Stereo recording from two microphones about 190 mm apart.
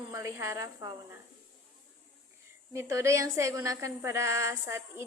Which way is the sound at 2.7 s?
15° right (ahead or behind).